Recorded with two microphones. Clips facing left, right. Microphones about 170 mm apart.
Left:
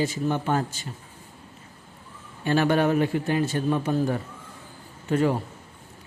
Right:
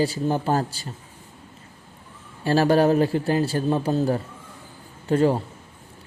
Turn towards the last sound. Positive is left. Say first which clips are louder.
# right 3 dB
turn(degrees=-30)  # may be behind; listen again after turning